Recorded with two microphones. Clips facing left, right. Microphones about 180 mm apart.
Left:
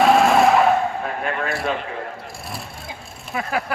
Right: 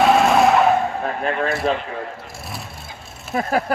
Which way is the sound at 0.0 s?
Centre (ahead or behind).